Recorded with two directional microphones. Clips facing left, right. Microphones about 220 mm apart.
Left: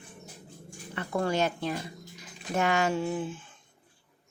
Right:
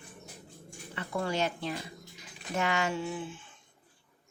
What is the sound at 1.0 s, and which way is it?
Speech, 50° left (ahead or behind).